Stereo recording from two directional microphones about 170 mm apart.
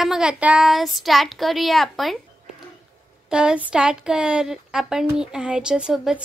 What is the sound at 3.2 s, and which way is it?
A woman's voice, 5° right (ahead or behind).